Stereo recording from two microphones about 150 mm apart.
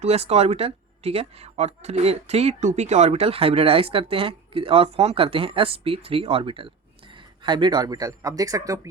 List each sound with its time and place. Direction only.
0.0 s speech: 45° right (ahead or behind); by 8.9 s 20° right (ahead or behind)